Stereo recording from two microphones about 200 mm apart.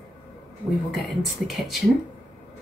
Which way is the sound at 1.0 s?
Centre (ahead or behind).